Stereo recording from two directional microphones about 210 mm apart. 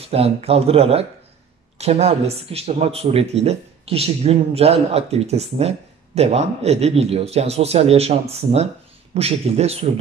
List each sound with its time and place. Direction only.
0.1 s speech: 30° right (ahead or behind)